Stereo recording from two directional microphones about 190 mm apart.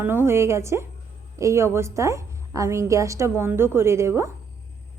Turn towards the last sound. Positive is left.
turn(degrees=-15)  # may be behind; listen again after turning